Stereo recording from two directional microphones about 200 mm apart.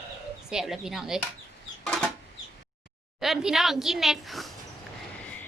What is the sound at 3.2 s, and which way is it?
A woman's voice, centre (ahead or behind).